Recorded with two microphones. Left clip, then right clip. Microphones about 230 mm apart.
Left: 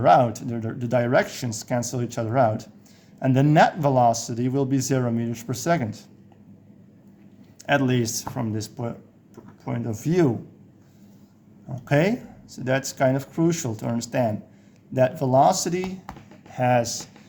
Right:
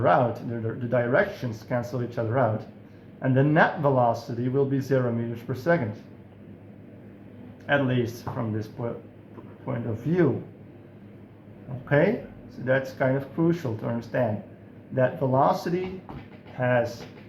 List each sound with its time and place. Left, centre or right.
0.0 s speech: left
7.7 s speech: left
11.9 s speech: left